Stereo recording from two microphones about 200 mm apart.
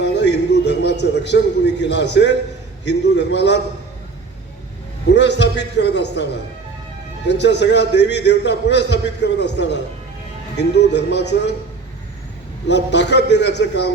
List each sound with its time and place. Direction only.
0.0 s a sound: 60° left (ahead or behind)
2.8 s a man's voice: 60° left (ahead or behind)
5.0 s a man's voice: 60° left (ahead or behind)
7.3 s a man's voice: 60° left (ahead or behind)
12.6 s a man's voice: 60° left (ahead or behind)